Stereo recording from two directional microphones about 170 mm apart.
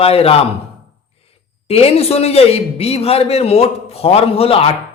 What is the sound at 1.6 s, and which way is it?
A man's voice, 35° left (ahead or behind).